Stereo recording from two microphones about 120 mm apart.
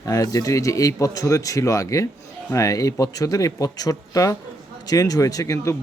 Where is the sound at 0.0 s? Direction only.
30° left (ahead or behind).